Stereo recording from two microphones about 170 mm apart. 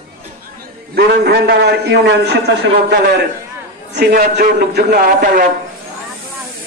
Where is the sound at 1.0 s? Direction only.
70° right (ahead or behind).